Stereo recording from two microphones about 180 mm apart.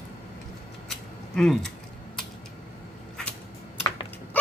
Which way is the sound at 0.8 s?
Centre (ahead or behind).